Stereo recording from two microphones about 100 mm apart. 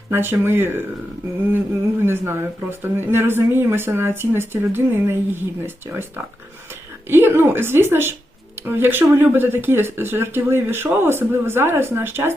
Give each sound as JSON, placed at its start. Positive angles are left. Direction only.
{"t": 0.1, "sound": "speech", "side_deg": -25}
{"t": 7.1, "sound": "speech", "side_deg": -25}